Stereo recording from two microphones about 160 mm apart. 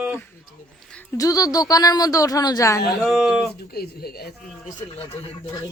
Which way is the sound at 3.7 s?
75° left (ahead or behind).